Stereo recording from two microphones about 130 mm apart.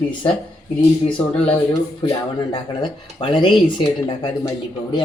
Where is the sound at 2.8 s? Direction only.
40° left (ahead or behind).